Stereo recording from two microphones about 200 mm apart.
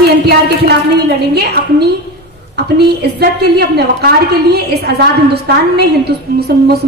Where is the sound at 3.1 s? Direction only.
55° right (ahead or behind).